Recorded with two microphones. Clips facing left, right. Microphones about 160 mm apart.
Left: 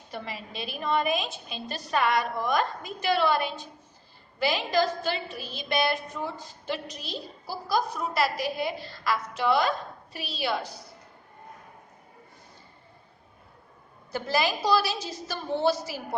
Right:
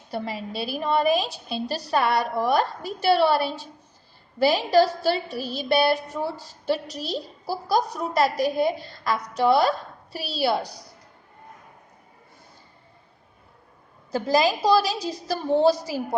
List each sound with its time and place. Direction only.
0.1 s a woman's voice: 35° right (ahead or behind)
14.6 s a woman's voice: 35° right (ahead or behind)